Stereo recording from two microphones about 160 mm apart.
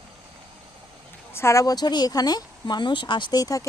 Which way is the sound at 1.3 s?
15° left (ahead or behind).